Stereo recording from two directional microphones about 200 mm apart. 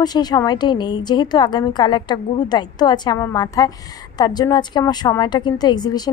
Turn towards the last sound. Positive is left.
turn(degrees=20)  # may be behind; listen again after turning